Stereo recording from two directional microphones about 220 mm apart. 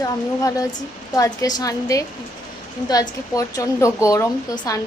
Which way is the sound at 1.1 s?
15° left (ahead or behind).